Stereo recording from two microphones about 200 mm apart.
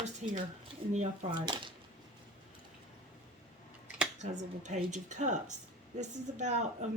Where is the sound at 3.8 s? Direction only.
5° right (ahead or behind).